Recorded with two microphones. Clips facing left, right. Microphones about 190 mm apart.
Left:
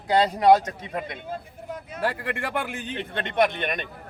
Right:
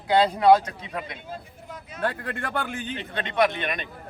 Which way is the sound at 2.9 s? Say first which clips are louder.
Left 1 dB; 55° left (ahead or behind).